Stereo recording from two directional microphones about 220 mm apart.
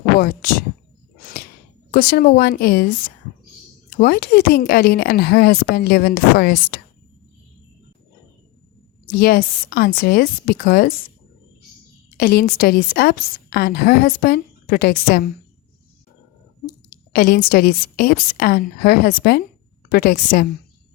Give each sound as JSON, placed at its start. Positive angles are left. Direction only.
{"t": 1.2, "sound": "a sound", "side_deg": 45}
{"t": 1.9, "sound": "a woman's voice", "side_deg": 45}
{"t": 3.8, "sound": "a woman's voice", "side_deg": 45}
{"t": 9.1, "sound": "a woman's voice", "side_deg": 45}
{"t": 12.1, "sound": "a woman's voice", "side_deg": 45}
{"t": 17.1, "sound": "a woman's voice", "side_deg": 40}